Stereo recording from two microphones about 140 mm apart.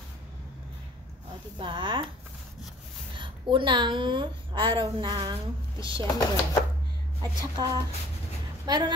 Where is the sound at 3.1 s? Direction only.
35° right (ahead or behind).